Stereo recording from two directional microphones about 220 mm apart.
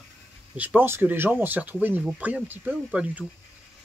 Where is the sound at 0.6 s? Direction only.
10° right (ahead or behind).